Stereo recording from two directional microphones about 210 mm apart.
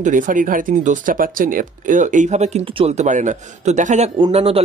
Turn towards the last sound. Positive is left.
turn(degrees=-30)  # may be behind; listen again after turning